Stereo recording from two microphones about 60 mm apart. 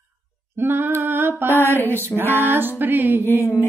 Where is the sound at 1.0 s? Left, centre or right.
Right.